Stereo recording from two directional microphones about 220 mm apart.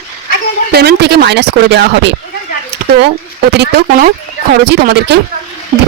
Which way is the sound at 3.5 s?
50° right (ahead or behind).